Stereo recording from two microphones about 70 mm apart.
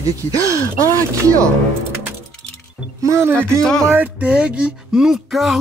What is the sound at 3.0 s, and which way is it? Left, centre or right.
Speech, right.